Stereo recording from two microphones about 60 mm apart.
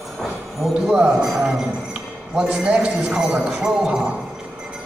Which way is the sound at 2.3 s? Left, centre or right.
Centre.